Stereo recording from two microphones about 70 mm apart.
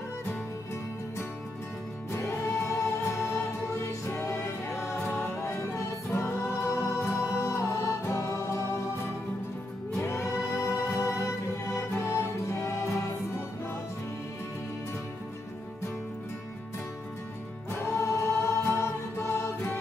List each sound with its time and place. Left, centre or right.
2.1 s choir: left
3.7 s music: left
17.6 s music: left